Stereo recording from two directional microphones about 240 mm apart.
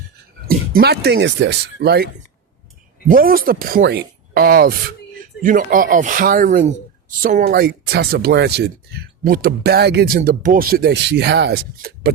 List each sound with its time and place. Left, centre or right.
0.4 s speech: right
3.1 s speech: right